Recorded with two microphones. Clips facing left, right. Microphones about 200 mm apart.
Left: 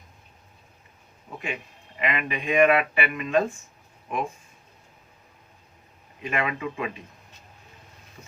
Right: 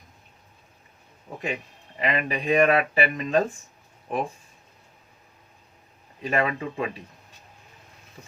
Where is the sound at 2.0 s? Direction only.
35° right (ahead or behind).